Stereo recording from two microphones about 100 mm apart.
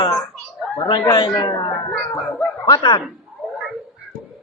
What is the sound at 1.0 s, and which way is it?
A man's voice, 40° left (ahead or behind).